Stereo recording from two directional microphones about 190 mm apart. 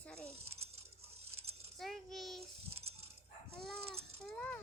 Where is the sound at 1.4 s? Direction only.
30° right (ahead or behind).